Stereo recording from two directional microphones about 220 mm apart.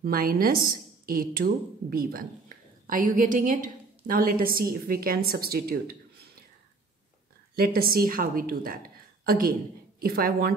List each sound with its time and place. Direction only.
0.0 s a woman's voice: 40° right (ahead or behind)
7.5 s a woman's voice: 45° right (ahead or behind)